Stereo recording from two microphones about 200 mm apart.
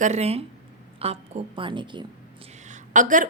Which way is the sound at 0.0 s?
35° right (ahead or behind).